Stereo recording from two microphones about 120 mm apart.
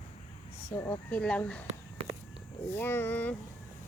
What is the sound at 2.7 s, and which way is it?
Speech, 20° left (ahead or behind).